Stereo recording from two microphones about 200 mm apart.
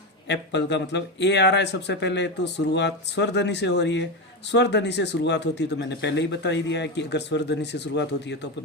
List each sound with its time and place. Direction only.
0.3 s speech: 60° left (ahead or behind)